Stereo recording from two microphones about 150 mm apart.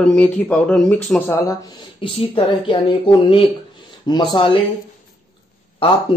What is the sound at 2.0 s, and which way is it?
Speech, 40° left (ahead or behind).